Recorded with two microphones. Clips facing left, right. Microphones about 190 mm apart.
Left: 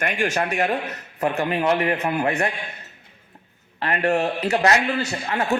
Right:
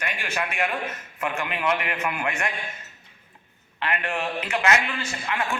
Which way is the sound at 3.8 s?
40° left (ahead or behind).